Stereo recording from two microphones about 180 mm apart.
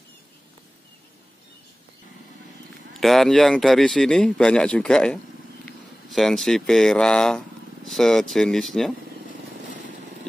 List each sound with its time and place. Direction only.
3.0 s speech: centre (ahead or behind)